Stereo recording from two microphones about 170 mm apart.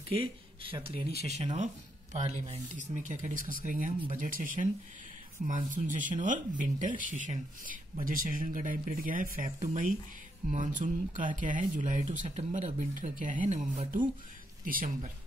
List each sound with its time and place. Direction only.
0.6 s speech: 30° right (ahead or behind); by 4.6 s 55° right (ahead or behind)
5.7 s speech: 50° right (ahead or behind)